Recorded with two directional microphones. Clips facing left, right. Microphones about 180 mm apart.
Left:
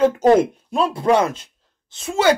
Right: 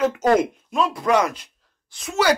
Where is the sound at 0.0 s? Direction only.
30° left (ahead or behind).